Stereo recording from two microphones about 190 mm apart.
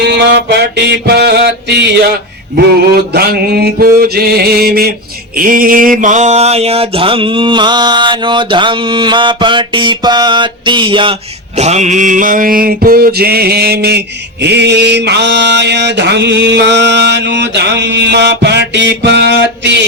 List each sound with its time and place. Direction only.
0.0 s mantra: 60° right (ahead or behind)
2.9 s mantra: 55° right (ahead or behind); by 11.1 s 25° right (ahead or behind)
11.5 s mantra: 35° right (ahead or behind); by 19.5 s 60° right (ahead or behind)